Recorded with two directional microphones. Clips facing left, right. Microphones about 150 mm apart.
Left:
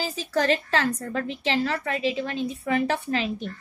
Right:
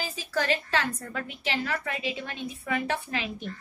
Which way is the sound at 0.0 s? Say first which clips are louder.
Left 5 dB; 35° left (ahead or behind).